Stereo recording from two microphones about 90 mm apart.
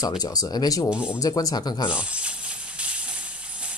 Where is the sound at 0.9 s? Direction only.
15° right (ahead or behind).